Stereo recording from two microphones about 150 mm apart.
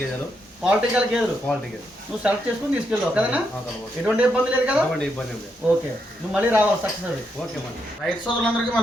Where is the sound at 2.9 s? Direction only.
10° right (ahead or behind).